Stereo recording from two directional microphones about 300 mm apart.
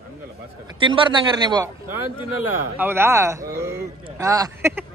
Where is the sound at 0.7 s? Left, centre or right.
Centre.